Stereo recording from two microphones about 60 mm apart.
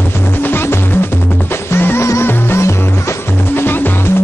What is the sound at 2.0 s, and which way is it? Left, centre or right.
Music, left.